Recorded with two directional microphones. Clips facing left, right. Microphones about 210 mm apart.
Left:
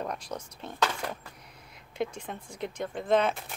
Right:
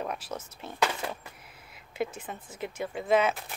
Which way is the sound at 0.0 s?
5° right (ahead or behind).